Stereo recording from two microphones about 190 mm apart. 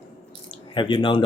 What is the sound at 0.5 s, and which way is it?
Speech, 25° left (ahead or behind).